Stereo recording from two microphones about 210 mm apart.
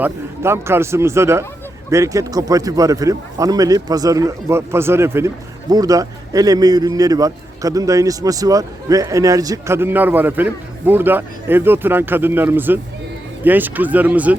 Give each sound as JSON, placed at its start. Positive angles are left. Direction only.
{"t": 0.0, "sound": "a man's voice", "side_deg": -10}